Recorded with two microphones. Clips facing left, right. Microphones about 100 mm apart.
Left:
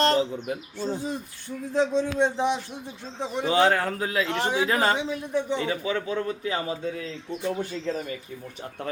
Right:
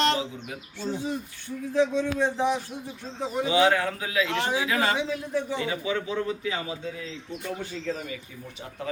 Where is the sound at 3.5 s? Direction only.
45° left (ahead or behind).